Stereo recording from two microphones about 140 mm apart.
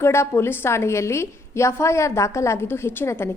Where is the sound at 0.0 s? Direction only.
20° left (ahead or behind).